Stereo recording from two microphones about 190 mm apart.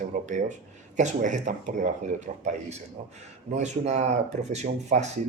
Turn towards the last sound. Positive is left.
turn(degrees=-35)  # may be behind; listen again after turning